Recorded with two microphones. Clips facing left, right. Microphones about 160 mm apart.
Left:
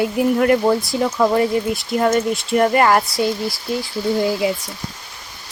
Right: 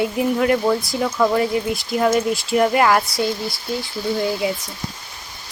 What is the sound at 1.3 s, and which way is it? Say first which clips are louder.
Speech: left 2 dB; centre (ahead or behind).